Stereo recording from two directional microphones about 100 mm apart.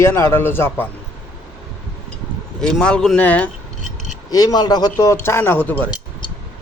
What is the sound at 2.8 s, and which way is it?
Speech, 5° left (ahead or behind).